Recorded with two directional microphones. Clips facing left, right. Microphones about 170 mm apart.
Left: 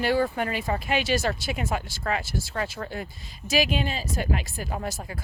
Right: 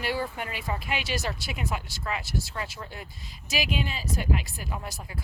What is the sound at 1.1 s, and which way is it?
Speech, 50° left (ahead or behind).